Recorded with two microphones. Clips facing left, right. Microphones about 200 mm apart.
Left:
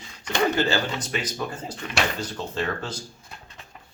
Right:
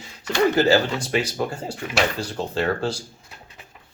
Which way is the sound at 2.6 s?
35° right (ahead or behind).